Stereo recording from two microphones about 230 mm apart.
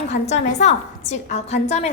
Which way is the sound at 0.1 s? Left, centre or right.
Left.